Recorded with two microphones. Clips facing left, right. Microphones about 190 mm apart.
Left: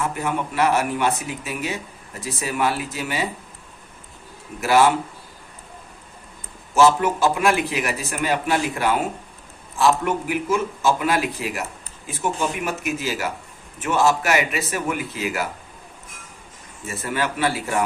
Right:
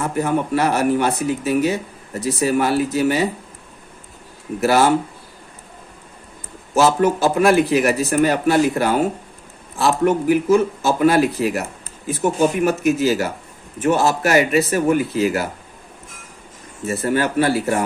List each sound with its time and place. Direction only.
0.0 s a man's voice: 40° right (ahead or behind)
4.6 s a man's voice: 40° right (ahead or behind)
6.7 s a man's voice: 40° right (ahead or behind)
16.8 s a man's voice: 40° right (ahead or behind)